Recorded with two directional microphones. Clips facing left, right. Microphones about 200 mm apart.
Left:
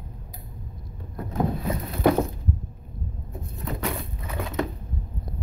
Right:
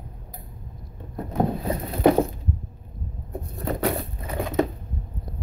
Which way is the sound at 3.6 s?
40° right (ahead or behind).